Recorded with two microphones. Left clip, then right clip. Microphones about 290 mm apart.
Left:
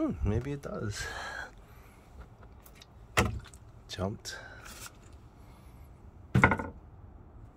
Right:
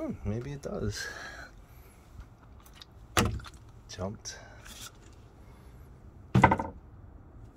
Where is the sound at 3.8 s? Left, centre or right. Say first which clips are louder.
Left 2 dB; centre.